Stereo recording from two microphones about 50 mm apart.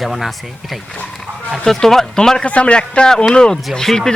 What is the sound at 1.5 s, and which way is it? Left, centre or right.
Speech, centre.